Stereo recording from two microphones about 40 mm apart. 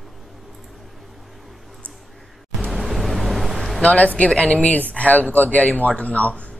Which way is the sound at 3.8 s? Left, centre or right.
Left.